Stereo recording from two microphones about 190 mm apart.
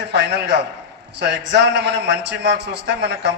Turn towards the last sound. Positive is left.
turn(degrees=-65)  # may be behind; listen again after turning